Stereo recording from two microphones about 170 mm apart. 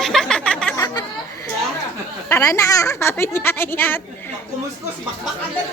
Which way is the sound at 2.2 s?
15° left (ahead or behind).